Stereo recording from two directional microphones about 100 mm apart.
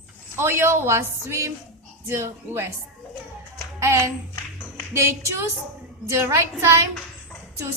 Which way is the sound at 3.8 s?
30° right (ahead or behind).